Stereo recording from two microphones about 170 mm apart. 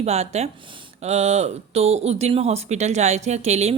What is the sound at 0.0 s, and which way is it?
A woman's voice, 40° right (ahead or behind).